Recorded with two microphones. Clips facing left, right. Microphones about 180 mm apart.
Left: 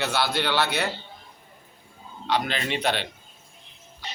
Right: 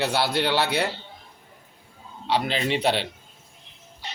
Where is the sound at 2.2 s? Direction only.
30° right (ahead or behind).